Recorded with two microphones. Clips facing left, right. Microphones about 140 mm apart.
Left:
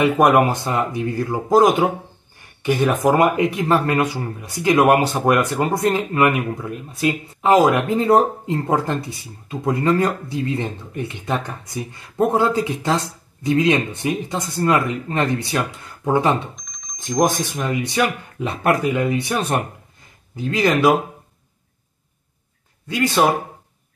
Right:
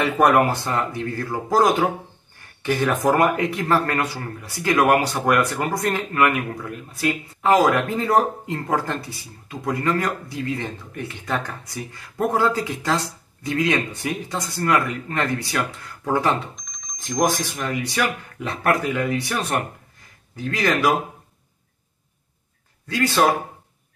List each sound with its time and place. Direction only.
0.0 s speech: 15° left (ahead or behind)
16.5 s telephone bell ringing: centre (ahead or behind)
17.2 s speech: 20° left (ahead or behind)
22.8 s speech: 20° left (ahead or behind)